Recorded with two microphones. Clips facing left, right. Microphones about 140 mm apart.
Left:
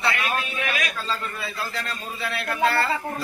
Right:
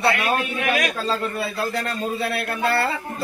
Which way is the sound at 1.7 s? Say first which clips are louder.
Right 7 dB; 45° right (ahead or behind).